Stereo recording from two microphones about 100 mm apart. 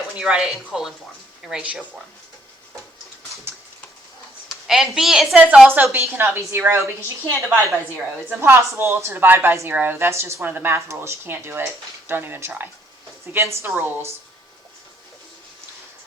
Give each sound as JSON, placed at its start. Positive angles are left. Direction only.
{"t": 0.1, "sound": "speech", "side_deg": -10}
{"t": 4.4, "sound": "a woman's voice", "side_deg": -5}
{"t": 5.6, "sound": "a woman's voice", "side_deg": -20}